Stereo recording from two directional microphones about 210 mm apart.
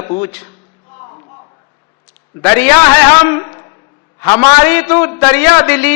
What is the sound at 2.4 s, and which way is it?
Speech, 10° left (ahead or behind).